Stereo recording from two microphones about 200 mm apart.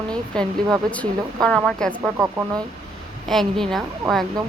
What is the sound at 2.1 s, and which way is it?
Speech, 15° right (ahead or behind).